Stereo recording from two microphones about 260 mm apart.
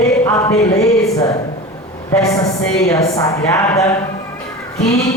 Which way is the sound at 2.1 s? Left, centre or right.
Centre.